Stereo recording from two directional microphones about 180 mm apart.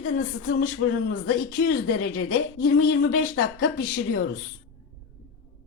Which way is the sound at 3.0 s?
90° left.